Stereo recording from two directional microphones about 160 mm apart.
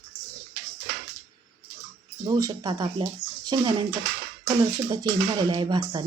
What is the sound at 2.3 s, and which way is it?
Speech, 25° right (ahead or behind).